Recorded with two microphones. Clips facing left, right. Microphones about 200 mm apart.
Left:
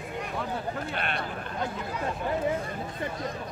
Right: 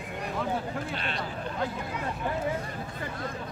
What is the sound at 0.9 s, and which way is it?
Speech, 55° left (ahead or behind).